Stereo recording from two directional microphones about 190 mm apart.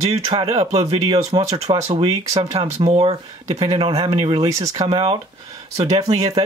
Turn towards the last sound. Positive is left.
turn(degrees=-20)  # may be behind; listen again after turning